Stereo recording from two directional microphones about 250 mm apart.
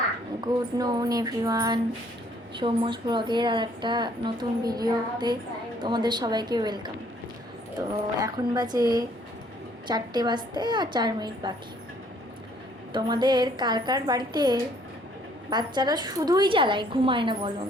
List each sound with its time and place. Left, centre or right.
0.4 s a woman's voice: centre
8.2 s a woman's voice: centre
12.9 s a woman's voice: centre